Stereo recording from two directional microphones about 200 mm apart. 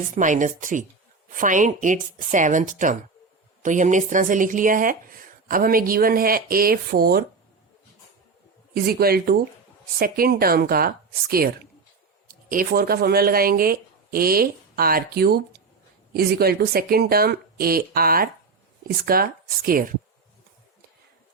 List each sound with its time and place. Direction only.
0.2 s speech: 40° right (ahead or behind)
8.7 s speech: 50° right (ahead or behind)